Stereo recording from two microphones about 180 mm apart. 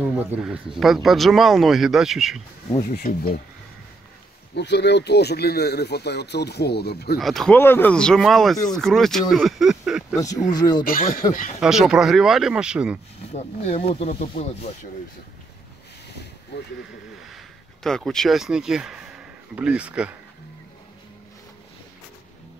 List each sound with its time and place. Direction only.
0.4 s speech: 5° right (ahead or behind)
2.8 s speech: 55° left (ahead or behind)
4.6 s speech: 70° left (ahead or behind)
7.2 s speech: centre (ahead or behind)
10.1 s speech: 20° left (ahead or behind)
10.8 s speech: 50° left (ahead or behind)
11.6 s speech: 5° right (ahead or behind)
13.2 s speech: 35° left (ahead or behind)
16.5 s speech: 70° left (ahead or behind)
17.8 s speech: 5° left (ahead or behind)